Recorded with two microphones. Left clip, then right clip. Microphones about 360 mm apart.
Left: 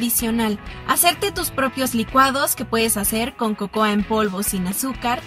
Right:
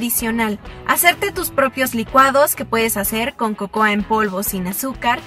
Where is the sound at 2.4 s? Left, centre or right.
Centre.